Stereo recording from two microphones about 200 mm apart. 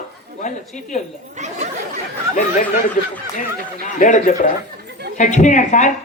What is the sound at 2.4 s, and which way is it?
Speech, 40° left (ahead or behind).